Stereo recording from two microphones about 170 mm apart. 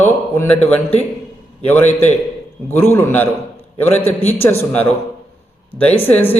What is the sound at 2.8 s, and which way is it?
Speech, 15° left (ahead or behind).